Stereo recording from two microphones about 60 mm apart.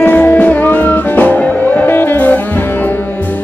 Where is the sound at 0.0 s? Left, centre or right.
Left.